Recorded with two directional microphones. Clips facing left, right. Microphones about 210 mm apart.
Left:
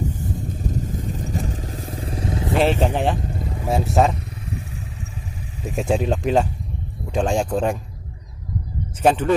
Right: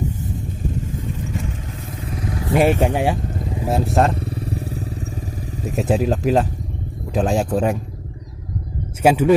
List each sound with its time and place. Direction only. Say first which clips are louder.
0.6 s vehicle: even; 40° left (ahead or behind)
2.5 s speech: right 3 dB; 10° right (ahead or behind)
4.1 s motorcycle: right 5 dB; 30° right (ahead or behind)
5.8 s speech: right 2 dB; centre (ahead or behind)
9.0 s a man's voice: right 3 dB; 10° right (ahead or behind)